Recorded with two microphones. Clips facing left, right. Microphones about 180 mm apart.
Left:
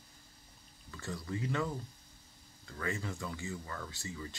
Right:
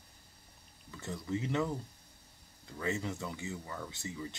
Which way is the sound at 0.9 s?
20° right (ahead or behind).